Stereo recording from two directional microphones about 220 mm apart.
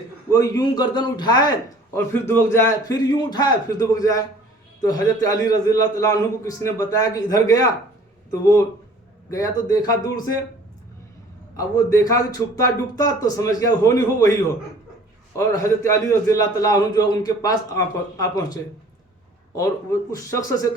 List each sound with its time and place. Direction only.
0.3 s a man's voice: 15° left (ahead or behind)
11.5 s a man's voice: 15° left (ahead or behind)
15.4 s a man's voice: 15° left (ahead or behind)